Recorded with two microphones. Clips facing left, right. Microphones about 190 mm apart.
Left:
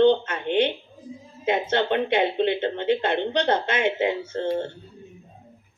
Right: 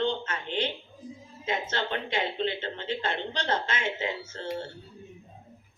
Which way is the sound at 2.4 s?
60° left (ahead or behind).